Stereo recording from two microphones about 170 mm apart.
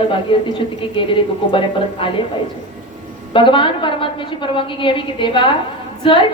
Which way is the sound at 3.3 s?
30° left (ahead or behind).